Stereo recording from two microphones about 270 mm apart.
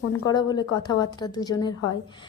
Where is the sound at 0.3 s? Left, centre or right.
Centre.